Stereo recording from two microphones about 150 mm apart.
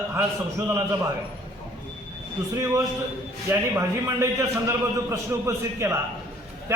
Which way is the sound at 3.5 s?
20° right (ahead or behind).